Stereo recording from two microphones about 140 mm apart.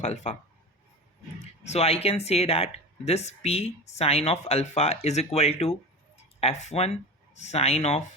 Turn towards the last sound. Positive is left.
turn(degrees=50)  # may be behind; listen again after turning